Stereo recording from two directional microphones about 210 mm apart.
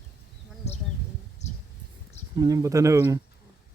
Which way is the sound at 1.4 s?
30° left (ahead or behind).